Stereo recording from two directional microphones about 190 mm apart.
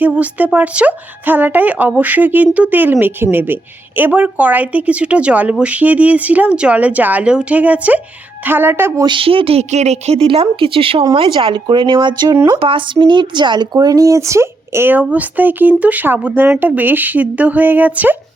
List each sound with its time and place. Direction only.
0.0 s speech: 10° right (ahead or behind)
9.0 s speech: 25° right (ahead or behind); by 18.2 s 10° right (ahead or behind)